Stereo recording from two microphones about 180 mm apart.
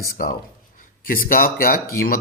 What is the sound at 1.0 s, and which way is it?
Speech, 50° left (ahead or behind).